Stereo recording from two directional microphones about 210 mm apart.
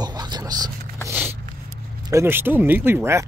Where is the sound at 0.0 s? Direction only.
20° right (ahead or behind).